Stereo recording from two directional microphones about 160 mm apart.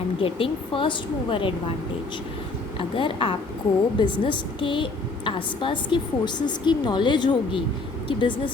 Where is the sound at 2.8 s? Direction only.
35° left (ahead or behind).